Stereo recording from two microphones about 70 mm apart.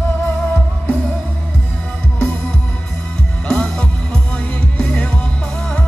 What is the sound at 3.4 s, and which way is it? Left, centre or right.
Music, centre.